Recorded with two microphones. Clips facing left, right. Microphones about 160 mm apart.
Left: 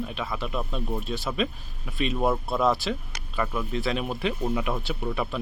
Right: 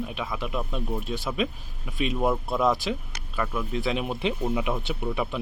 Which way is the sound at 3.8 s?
15° right (ahead or behind).